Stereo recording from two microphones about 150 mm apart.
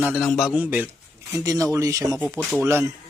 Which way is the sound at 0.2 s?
Centre (ahead or behind).